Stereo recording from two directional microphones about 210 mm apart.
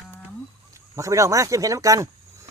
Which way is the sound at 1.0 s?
15° right (ahead or behind).